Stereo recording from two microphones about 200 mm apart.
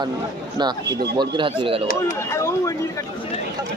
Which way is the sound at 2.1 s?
15° left (ahead or behind).